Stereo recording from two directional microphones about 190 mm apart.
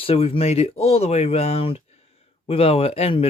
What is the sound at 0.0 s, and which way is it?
Speech, 30° left (ahead or behind).